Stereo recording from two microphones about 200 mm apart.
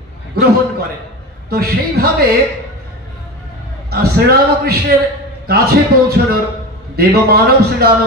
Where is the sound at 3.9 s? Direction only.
50° right (ahead or behind).